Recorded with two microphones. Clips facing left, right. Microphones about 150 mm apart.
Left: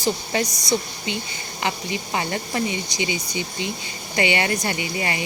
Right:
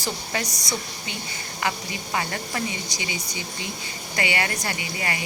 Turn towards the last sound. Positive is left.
turn(degrees=25)  # may be behind; listen again after turning